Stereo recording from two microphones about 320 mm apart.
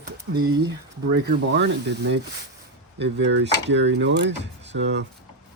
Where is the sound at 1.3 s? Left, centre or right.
Right.